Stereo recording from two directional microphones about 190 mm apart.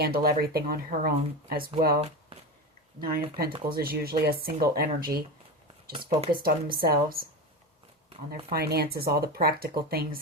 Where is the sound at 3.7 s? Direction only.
50° right (ahead or behind).